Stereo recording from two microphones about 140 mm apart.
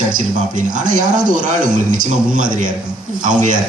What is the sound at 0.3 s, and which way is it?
Speech, 65° right (ahead or behind).